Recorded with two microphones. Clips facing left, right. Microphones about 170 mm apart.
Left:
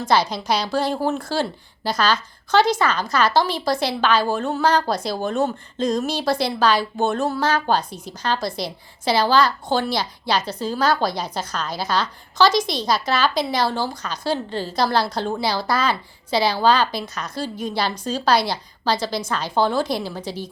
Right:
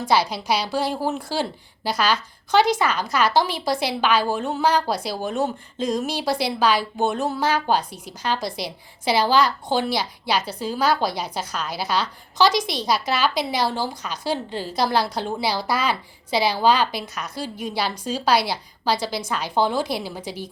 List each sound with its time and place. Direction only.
0.1 s a woman's voice: 10° right (ahead or behind)